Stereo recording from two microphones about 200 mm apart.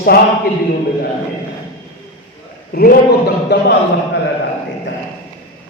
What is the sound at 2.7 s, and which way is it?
A man's voice, 50° left (ahead or behind).